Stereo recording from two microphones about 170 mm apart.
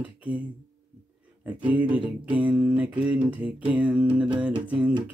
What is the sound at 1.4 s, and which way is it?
Mantra, 10° right (ahead or behind).